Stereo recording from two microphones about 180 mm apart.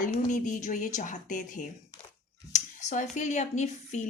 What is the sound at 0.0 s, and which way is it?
Speech, 45° left (ahead or behind).